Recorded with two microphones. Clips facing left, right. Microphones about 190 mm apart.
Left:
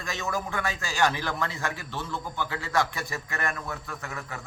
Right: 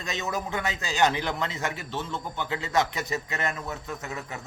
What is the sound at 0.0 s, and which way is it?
Speech, 20° right (ahead or behind).